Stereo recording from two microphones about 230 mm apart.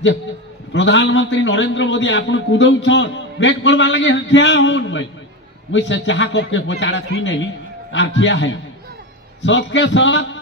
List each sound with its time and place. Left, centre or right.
0.7 s a man's voice: left